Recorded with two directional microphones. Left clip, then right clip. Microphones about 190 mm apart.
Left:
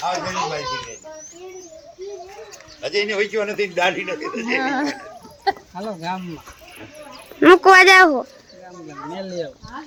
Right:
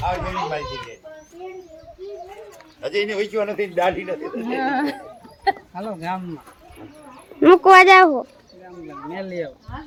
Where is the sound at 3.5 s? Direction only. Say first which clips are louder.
Left 1 dB; 10° left (ahead or behind).